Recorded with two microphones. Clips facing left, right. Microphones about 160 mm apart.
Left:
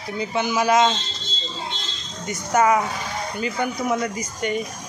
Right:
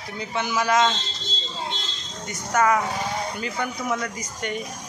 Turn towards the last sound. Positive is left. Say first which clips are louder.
# left 5 dB
turn(degrees=10)  # may be behind; listen again after turning